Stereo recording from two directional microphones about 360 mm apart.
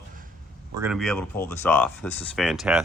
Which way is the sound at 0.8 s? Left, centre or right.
Centre.